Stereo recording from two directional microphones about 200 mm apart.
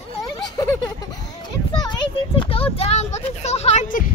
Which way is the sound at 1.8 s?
25° left (ahead or behind).